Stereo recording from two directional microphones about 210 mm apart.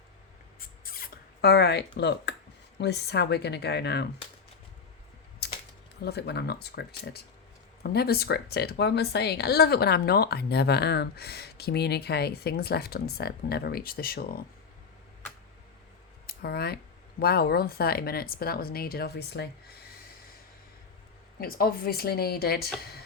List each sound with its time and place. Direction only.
0.6 s rodents: 45° left (ahead or behind)
2.7 s a woman's voice: 55° left (ahead or behind)
5.4 s a sound: 50° left (ahead or behind)
6.0 s a woman's voice: 50° left (ahead or behind)
16.2 s a woman's voice: 50° left (ahead or behind)
21.3 s a woman's voice: 45° left (ahead or behind)